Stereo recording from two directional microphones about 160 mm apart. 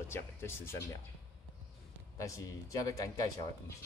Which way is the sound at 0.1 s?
15° left (ahead or behind).